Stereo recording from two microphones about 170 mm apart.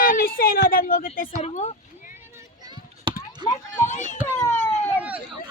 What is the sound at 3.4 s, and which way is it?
Speech, 25° right (ahead or behind).